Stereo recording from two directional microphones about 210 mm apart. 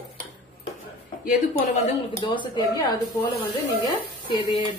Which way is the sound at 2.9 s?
10° left (ahead or behind).